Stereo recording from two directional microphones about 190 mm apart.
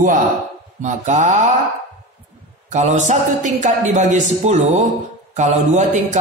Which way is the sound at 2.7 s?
40° right (ahead or behind).